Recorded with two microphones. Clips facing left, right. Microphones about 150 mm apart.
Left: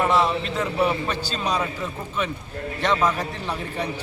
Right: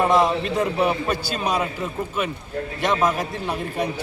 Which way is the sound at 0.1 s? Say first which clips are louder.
Right 3 dB; 15° right (ahead or behind).